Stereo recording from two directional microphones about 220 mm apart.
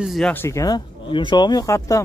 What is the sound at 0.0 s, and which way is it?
Speech, centre (ahead or behind).